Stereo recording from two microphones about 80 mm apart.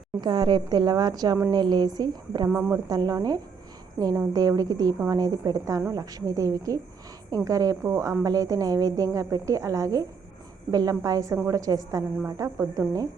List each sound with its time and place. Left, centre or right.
0.2 s a woman's voice: right
2.5 s speech: right
2.7 s a woman's voice: right